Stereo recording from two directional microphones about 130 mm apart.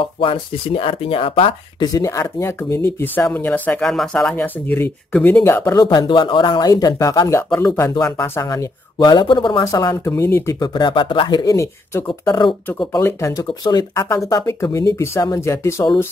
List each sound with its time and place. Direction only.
0.0 s speech: 40° left (ahead or behind)
1.9 s speech: 25° left (ahead or behind)
5.9 s speech: 40° left (ahead or behind)
9.7 s speech: 25° left (ahead or behind)
12.1 s speech: 35° left (ahead or behind)
13.0 s speech: 25° left (ahead or behind)